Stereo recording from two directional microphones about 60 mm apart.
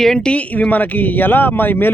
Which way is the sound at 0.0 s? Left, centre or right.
Centre.